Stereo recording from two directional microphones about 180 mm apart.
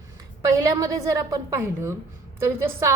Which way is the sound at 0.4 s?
20° right (ahead or behind).